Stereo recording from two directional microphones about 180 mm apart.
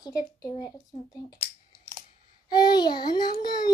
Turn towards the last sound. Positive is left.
turn(degrees=20)  # may be behind; listen again after turning